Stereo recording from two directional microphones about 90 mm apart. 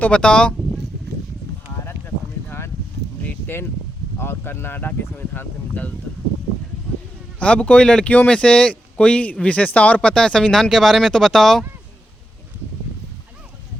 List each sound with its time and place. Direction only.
0.0 s speech: 10° left (ahead or behind)
3.2 s a sound: 25° left (ahead or behind)
4.2 s speech: 25° left (ahead or behind)
7.3 s speech: 15° left (ahead or behind)